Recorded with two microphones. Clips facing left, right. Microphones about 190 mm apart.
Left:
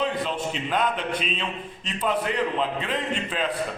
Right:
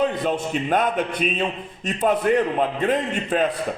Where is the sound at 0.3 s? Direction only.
50° right (ahead or behind).